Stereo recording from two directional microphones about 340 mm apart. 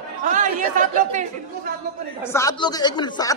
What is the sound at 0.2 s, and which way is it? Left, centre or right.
Chatter, right.